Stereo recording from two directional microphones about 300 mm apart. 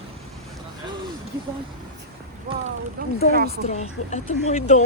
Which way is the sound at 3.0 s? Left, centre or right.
Right.